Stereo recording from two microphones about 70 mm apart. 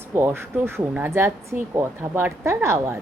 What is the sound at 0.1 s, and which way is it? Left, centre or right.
Speech, right.